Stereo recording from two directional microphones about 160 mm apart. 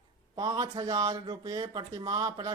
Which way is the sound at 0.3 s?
25° right (ahead or behind).